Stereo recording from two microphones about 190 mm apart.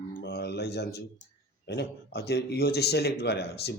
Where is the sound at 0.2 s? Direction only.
60° left (ahead or behind).